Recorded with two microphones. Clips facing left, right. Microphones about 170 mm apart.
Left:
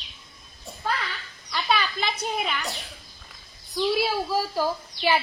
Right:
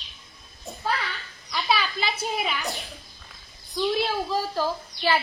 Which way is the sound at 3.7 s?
5° left (ahead or behind).